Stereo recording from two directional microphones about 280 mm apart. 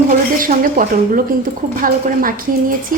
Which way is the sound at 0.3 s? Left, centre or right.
Right.